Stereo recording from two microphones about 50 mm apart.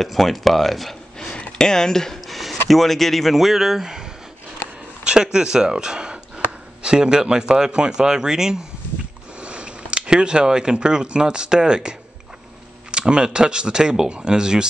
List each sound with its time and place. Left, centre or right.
0.0 s speech: centre
1.2 s speech: centre
9.4 s speech: right
12.9 s speech: centre